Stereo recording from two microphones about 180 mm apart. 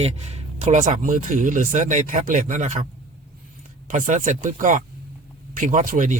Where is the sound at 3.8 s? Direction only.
45° right (ahead or behind).